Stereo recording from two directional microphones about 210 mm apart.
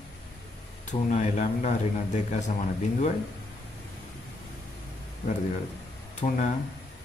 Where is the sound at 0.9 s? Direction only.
35° left (ahead or behind).